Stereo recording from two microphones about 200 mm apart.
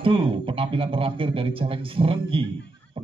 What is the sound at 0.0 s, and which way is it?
A man's voice, 25° right (ahead or behind).